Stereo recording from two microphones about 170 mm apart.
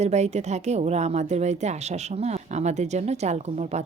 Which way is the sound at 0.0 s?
40° right (ahead or behind).